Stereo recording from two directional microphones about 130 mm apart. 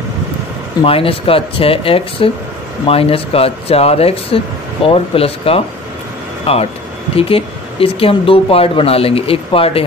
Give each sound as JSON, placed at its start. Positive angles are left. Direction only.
{"t": 0.8, "sound": "speech", "side_deg": 45}